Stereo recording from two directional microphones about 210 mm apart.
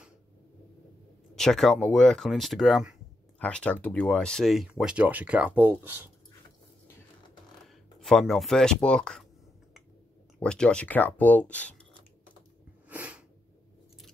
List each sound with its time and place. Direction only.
1.3 s speech: centre (ahead or behind)
7.6 s speech: centre (ahead or behind)
10.4 s speech: 5° left (ahead or behind)
12.8 s sneeze: 5° right (ahead or behind)